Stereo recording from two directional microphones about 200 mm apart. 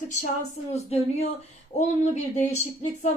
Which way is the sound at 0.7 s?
30° left (ahead or behind).